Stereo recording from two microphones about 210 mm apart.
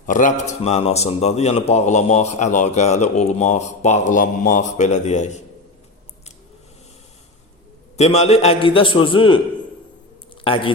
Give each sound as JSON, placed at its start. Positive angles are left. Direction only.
{"t": 0.0, "sound": "a man's voice", "side_deg": 40}
{"t": 7.9, "sound": "a man's voice", "side_deg": 30}
{"t": 10.4, "sound": "speech", "side_deg": 25}